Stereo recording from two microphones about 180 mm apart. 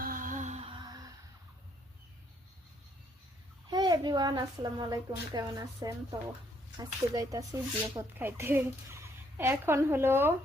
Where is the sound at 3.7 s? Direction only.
25° right (ahead or behind).